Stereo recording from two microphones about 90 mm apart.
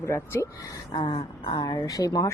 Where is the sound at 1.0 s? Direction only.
90° left.